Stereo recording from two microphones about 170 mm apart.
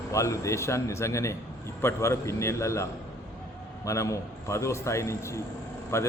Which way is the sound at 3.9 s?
20° left (ahead or behind).